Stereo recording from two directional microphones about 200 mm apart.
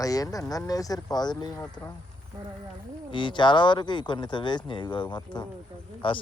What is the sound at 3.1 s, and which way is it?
Speech, 25° left (ahead or behind).